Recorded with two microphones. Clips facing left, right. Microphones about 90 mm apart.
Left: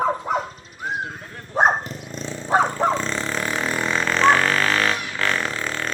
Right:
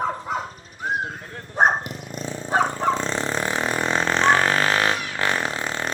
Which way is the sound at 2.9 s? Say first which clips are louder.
Even; 20° right (ahead or behind).